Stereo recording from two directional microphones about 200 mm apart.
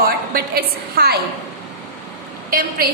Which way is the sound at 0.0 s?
50° right (ahead or behind).